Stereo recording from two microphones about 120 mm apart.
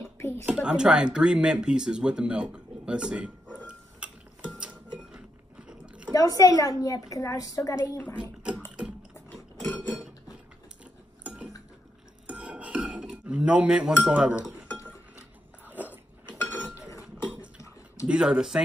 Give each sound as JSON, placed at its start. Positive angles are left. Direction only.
{"t": 0.0, "sound": "a sound", "side_deg": 20}
{"t": 0.5, "sound": "speech", "side_deg": -5}
{"t": 5.7, "sound": "chewing", "side_deg": -10}
{"t": 6.1, "sound": "a woman's voice", "side_deg": 30}
{"t": 9.6, "sound": "cutlery", "side_deg": 10}
{"t": 10.8, "sound": "cutlery", "side_deg": -10}
{"t": 12.3, "sound": "dishes", "side_deg": -10}
{"t": 14.0, "sound": "speech", "side_deg": -10}
{"t": 14.7, "sound": "chink", "side_deg": 15}
{"t": 16.3, "sound": "a sound", "side_deg": 15}
{"t": 18.0, "sound": "speech", "side_deg": -10}